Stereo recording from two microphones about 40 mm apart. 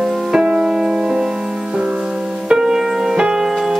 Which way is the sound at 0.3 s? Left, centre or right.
Centre.